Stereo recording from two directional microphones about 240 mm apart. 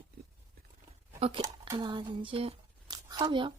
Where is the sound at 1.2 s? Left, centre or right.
Centre.